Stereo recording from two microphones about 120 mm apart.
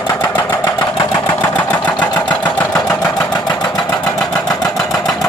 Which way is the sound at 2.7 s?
30° left (ahead or behind).